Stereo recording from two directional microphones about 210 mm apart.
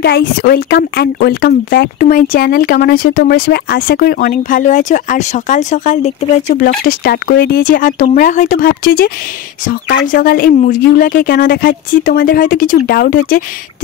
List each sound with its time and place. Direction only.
0.0 s speech: 50° left (ahead or behind)